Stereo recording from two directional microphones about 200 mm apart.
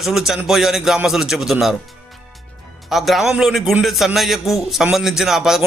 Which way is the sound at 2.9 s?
Centre (ahead or behind).